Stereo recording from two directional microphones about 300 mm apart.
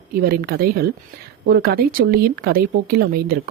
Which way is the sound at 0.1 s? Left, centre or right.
Right.